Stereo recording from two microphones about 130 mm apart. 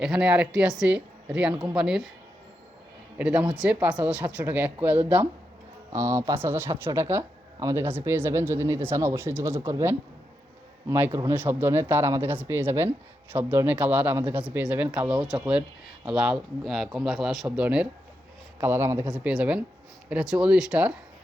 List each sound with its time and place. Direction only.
0.0 s speech: 5° right (ahead or behind)
3.2 s speech: 10° right (ahead or behind)
19.0 s speech: 10° right (ahead or behind)